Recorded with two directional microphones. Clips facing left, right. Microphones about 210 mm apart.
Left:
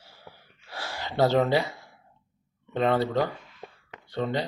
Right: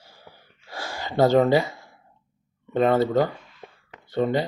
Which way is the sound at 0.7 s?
Centre (ahead or behind).